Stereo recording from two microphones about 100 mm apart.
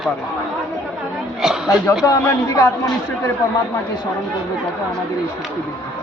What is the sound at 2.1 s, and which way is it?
Speech, 35° left (ahead or behind).